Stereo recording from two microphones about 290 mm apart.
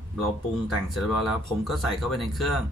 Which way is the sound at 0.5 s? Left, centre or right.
Centre.